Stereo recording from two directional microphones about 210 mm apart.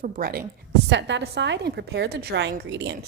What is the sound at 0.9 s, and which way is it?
A woman's voice, 55° right (ahead or behind).